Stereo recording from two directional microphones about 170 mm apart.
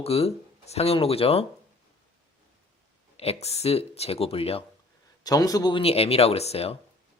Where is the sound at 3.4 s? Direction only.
40° left (ahead or behind).